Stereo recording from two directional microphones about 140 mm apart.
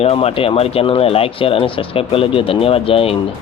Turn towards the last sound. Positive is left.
turn(degrees=40)  # may be behind; listen again after turning